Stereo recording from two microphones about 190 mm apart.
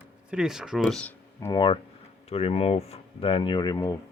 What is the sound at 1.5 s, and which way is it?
Speech, 25° left (ahead or behind).